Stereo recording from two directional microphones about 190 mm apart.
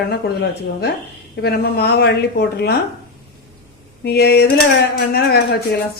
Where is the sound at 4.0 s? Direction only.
60° left (ahead or behind).